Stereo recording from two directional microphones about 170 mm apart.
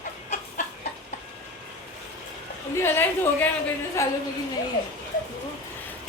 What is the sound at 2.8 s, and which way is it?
A woman's voice, 15° left (ahead or behind).